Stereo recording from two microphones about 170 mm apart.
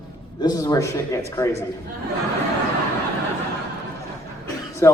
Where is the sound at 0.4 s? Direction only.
20° left (ahead or behind).